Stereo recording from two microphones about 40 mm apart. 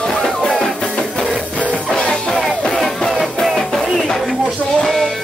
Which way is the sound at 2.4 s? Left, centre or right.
Centre.